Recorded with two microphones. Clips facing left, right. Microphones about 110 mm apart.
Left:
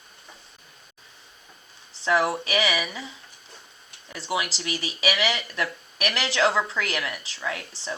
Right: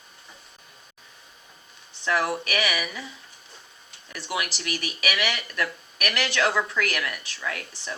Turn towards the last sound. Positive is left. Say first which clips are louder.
# left 2 dB
turn(degrees=25)  # may be behind; listen again after turning